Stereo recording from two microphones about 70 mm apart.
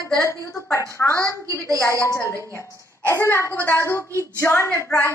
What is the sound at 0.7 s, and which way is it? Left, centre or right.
A woman's voice, left.